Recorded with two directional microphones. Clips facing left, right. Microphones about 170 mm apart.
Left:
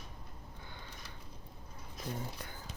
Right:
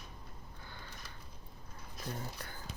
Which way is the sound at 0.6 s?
20° left (ahead or behind).